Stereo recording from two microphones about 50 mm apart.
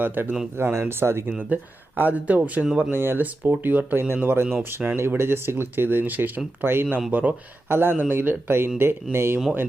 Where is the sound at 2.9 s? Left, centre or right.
Right.